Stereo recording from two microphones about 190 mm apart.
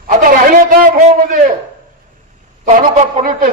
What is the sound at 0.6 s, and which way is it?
Speech, 45° right (ahead or behind).